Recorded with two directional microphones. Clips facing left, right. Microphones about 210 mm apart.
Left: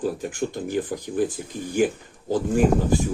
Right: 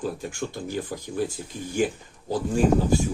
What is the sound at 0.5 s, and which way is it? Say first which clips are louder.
Speech: left 4 dB; 50° left (ahead or behind).